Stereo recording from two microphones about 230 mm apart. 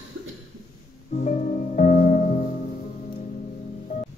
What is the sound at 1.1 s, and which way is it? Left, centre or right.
Music, left.